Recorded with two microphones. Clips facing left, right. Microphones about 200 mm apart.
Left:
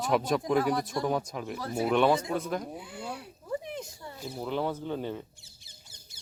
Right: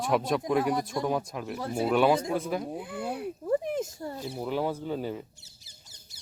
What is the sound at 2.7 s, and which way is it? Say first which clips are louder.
Speech: right 6 dB; 55° right (ahead or behind).